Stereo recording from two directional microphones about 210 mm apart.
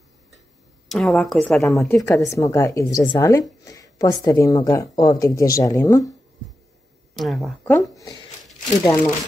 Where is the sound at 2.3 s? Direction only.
15° left (ahead or behind).